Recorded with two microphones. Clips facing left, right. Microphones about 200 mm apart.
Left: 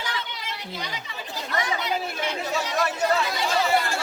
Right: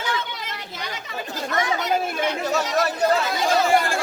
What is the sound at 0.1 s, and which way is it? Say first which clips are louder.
Chatter: right 5 dB; 50° right (ahead or behind).